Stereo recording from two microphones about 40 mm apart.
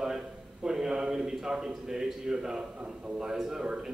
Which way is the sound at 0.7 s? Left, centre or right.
Centre.